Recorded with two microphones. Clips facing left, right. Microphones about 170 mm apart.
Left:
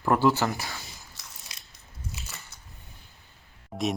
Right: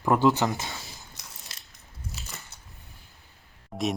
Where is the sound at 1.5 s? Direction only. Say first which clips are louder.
Even; 15° left (ahead or behind).